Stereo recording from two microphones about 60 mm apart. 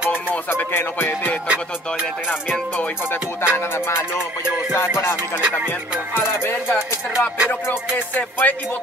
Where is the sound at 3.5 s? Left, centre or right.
Left.